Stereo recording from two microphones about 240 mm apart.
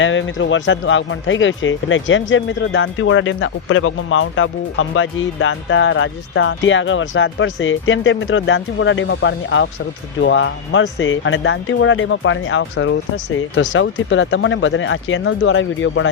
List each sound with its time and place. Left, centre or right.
0.0 s speech: left